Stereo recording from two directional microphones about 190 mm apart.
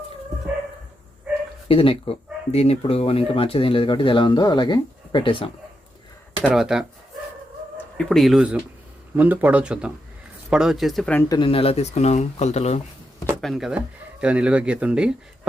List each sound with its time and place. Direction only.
1.6 s speech: 30° left (ahead or behind)
6.4 s speech: centre (ahead or behind)
7.9 s speech: centre (ahead or behind)
11.3 s speech: 25° left (ahead or behind)
13.4 s speech: centre (ahead or behind)